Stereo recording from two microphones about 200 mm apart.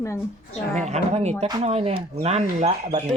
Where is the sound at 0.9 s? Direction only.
35° right (ahead or behind).